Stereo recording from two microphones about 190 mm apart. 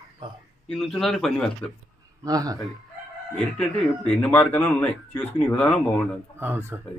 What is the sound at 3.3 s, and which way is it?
Speech, 5° left (ahead or behind).